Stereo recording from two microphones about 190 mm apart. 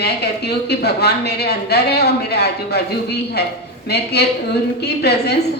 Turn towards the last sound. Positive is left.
turn(degrees=60)  # may be behind; listen again after turning